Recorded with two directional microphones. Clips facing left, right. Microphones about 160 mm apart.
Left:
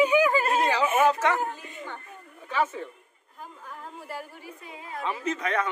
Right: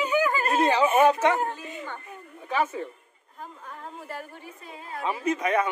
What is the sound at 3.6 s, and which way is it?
A woman's voice, 5° left (ahead or behind).